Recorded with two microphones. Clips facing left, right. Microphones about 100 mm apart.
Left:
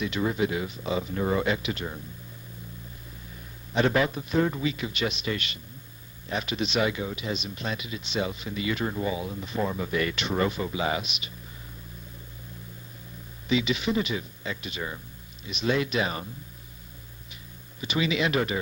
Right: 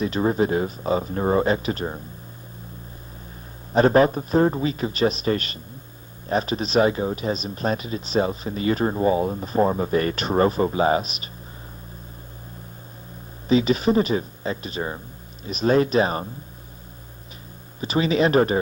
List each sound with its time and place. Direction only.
0.0 s speech: 40° right (ahead or behind)
3.7 s speech: 40° right (ahead or behind)
13.5 s speech: 40° right (ahead or behind)
17.7 s speech: 40° right (ahead or behind)